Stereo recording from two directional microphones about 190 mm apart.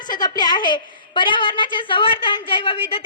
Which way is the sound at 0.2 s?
20° left (ahead or behind).